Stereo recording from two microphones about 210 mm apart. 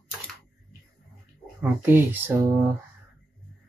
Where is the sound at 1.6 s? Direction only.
10° right (ahead or behind).